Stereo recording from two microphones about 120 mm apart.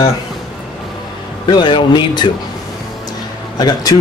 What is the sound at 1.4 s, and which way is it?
Speech, 40° left (ahead or behind).